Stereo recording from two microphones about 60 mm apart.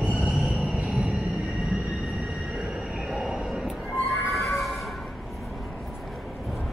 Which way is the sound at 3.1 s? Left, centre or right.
Centre.